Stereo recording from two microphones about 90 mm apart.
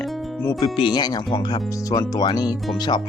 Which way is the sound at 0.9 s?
55° left (ahead or behind).